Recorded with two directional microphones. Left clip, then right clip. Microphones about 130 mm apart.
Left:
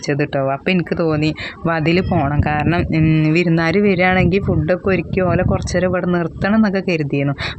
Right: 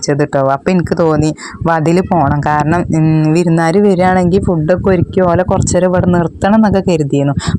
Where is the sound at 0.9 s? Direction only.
5° right (ahead or behind).